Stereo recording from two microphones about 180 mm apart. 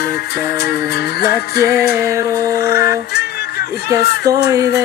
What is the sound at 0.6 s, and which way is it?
Music, 65° left (ahead or behind).